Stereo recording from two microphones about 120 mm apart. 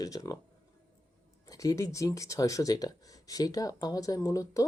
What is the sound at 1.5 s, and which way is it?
Speech, 30° left (ahead or behind).